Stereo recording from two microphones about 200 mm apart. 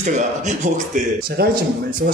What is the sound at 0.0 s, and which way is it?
Speech, 35° right (ahead or behind).